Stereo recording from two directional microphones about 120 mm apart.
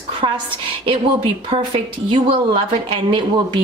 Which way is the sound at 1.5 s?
40° right (ahead or behind).